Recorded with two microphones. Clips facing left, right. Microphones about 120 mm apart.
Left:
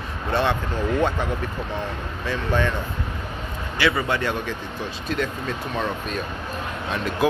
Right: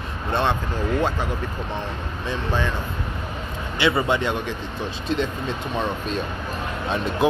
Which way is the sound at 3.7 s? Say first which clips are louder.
Right 2 dB; 25° right (ahead or behind).